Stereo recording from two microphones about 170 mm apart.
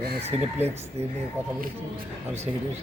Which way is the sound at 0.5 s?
15° right (ahead or behind).